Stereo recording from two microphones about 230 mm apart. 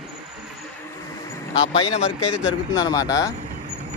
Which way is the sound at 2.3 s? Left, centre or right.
Centre.